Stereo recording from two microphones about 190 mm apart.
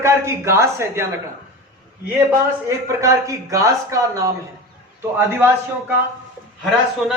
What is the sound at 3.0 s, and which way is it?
Speech, 15° right (ahead or behind).